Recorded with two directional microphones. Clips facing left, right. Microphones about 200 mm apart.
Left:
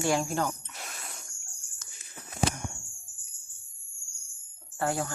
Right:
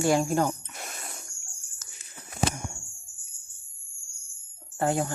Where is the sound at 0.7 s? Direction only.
45° right (ahead or behind).